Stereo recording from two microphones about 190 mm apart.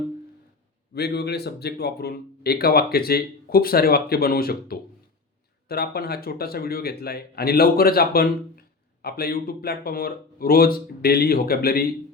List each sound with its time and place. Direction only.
0.9 s speech: 60° left (ahead or behind)